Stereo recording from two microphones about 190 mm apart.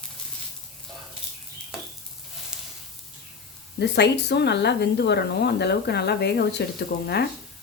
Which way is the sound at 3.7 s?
60° left (ahead or behind).